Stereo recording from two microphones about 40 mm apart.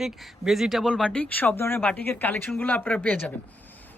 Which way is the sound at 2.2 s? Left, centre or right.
Left.